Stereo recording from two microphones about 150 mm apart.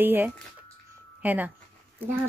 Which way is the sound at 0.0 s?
15° right (ahead or behind).